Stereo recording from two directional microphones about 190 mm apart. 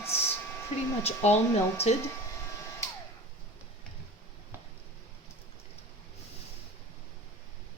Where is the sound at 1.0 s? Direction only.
35° left (ahead or behind).